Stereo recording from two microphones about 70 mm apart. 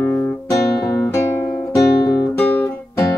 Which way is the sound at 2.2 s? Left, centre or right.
Left.